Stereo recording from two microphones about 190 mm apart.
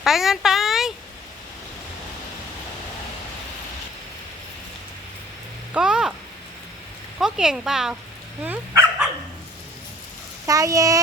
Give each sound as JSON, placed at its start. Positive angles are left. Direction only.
{"t": 0.0, "sound": "speech", "side_deg": 0}
{"t": 5.7, "sound": "speech", "side_deg": -5}
{"t": 7.2, "sound": "speech", "side_deg": -5}
{"t": 10.4, "sound": "speech", "side_deg": -15}